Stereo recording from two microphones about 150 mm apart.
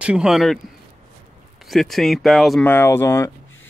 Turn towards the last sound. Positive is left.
turn(degrees=15)  # may be behind; listen again after turning